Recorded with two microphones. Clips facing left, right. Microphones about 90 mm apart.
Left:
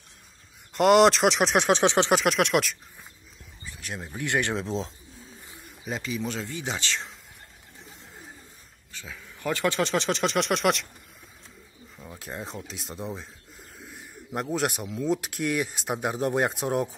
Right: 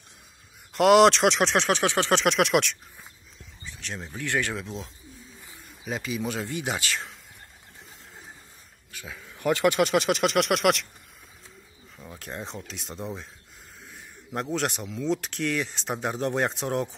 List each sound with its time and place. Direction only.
0.7 s speech: centre (ahead or behind)
1.6 s speech: 20° left (ahead or behind)
2.1 s speech: centre (ahead or behind); by 4.9 s 30° left (ahead or behind)
5.9 s speech: 5° right (ahead or behind)
8.9 s speech: 10° right (ahead or behind)
12.0 s speech: centre (ahead or behind)